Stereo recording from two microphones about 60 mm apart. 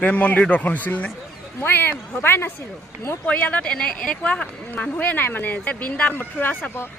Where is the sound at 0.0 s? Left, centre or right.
Left.